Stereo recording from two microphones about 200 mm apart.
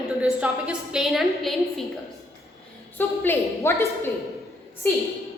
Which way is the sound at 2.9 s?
10° left (ahead or behind).